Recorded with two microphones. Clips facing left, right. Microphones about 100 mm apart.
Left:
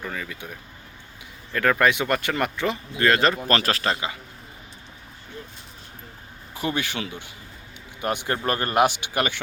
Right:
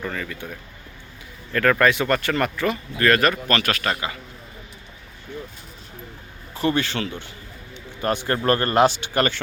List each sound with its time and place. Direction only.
0.0 s speech: 10° left (ahead or behind)
1.5 s speech: 10° left (ahead or behind); by 3.9 s 30° left (ahead or behind)
6.5 s speech: 10° left (ahead or behind)